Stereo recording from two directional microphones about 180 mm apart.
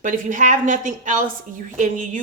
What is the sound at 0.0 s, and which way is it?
A woman's voice, 45° right (ahead or behind).